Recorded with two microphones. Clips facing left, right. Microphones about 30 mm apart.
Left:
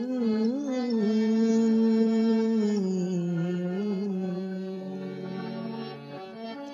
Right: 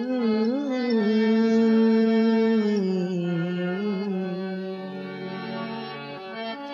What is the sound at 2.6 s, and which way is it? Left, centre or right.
Music, right.